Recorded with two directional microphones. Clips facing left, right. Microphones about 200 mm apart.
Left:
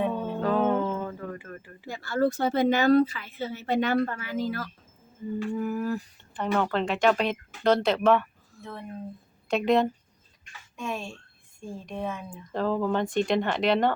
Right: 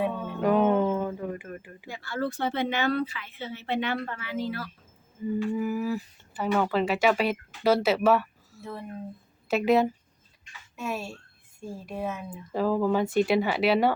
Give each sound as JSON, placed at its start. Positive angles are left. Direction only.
{"t": 0.0, "sound": "music", "side_deg": -15}
{"t": 1.9, "sound": "a woman's voice", "side_deg": 40}
{"t": 5.2, "sound": "a woman's voice", "side_deg": -10}